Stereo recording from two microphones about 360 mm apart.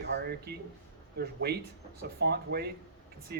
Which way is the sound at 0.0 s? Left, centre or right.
Right.